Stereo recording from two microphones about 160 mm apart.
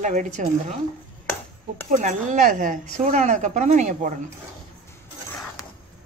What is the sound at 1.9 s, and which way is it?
Speech, 50° right (ahead or behind).